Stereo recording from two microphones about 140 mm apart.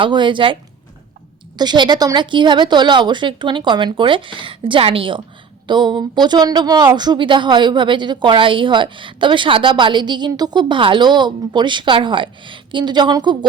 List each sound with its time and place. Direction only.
0.0 s speech: 35° right (ahead or behind)
1.5 s speech: 30° right (ahead or behind)